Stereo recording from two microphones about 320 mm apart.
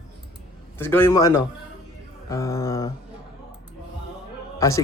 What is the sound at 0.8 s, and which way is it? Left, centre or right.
Speech, centre.